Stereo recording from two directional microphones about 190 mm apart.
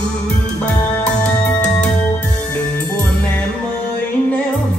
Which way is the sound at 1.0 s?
5° left (ahead or behind).